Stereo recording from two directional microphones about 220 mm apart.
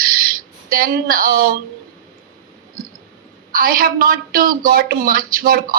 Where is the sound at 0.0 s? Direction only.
40° right (ahead or behind).